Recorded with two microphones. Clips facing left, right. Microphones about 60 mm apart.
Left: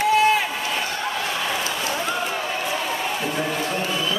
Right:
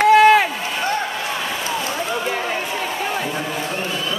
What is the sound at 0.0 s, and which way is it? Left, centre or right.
Run, right.